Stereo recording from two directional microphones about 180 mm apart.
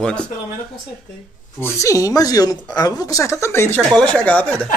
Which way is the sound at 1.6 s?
20° left (ahead or behind).